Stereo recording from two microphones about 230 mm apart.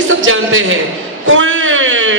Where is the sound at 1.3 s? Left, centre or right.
Right.